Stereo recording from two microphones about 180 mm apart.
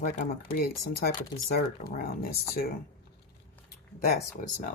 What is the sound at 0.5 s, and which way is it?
Speech, 55° left (ahead or behind).